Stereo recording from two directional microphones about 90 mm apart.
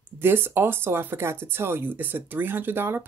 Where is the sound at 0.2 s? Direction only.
25° right (ahead or behind).